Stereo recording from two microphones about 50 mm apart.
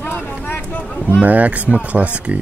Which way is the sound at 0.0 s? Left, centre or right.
Left.